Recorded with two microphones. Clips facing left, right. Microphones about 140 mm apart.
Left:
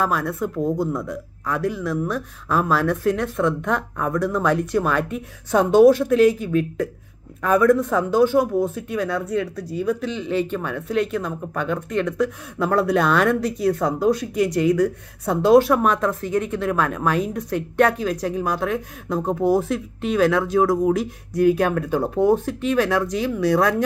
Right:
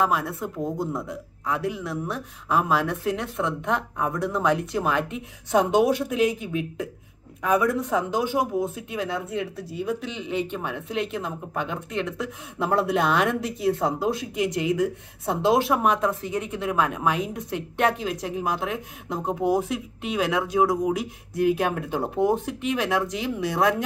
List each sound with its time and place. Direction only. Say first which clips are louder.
0.0 s speech: left 2 dB; 20° right (ahead or behind)